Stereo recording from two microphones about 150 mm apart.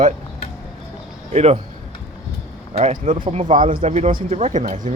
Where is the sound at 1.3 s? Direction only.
45° right (ahead or behind).